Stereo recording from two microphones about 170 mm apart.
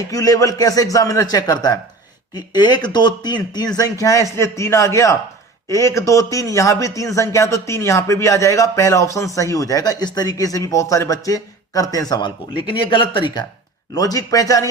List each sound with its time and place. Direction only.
0.1 s a man's voice: 20° left (ahead or behind)